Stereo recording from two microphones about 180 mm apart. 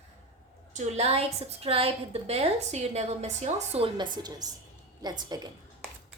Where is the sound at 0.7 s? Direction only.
35° right (ahead or behind).